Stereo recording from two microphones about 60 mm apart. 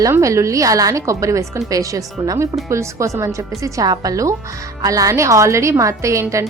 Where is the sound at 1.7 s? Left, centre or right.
Right.